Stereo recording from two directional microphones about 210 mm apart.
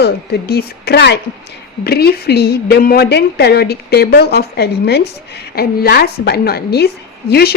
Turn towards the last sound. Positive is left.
turn(degrees=50)  # may be behind; listen again after turning